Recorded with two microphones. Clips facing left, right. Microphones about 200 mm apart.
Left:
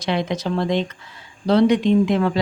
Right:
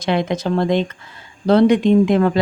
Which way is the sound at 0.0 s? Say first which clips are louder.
Right 3 dB; 50° right (ahead or behind).